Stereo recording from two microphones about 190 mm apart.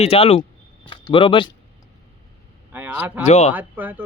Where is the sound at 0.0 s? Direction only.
30° left (ahead or behind).